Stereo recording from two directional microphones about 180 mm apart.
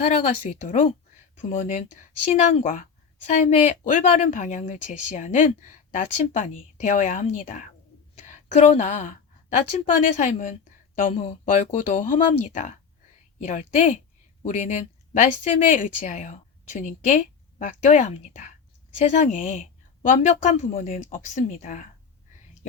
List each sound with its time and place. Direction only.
0.6 s a woman's voice: 45° left (ahead or behind)
11.1 s a woman's voice: 35° left (ahead or behind)